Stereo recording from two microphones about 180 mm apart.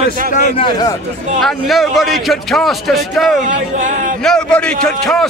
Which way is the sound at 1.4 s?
Centre (ahead or behind).